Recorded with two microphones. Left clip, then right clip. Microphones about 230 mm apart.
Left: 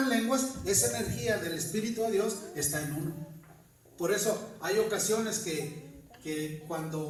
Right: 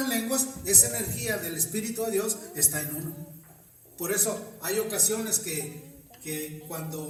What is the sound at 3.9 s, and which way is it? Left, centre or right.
A man's voice, right.